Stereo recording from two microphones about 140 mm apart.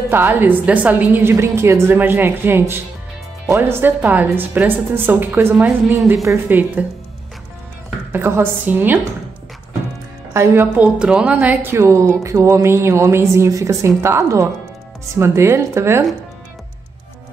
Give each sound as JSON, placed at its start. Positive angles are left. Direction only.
{"t": 0.1, "sound": "a woman's voice", "side_deg": -15}
{"t": 8.1, "sound": "a woman's voice", "side_deg": -15}
{"t": 10.3, "sound": "a woman's voice", "side_deg": -20}